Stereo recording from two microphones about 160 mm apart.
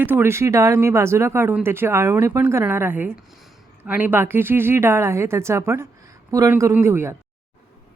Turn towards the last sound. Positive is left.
turn(degrees=-15)  # may be behind; listen again after turning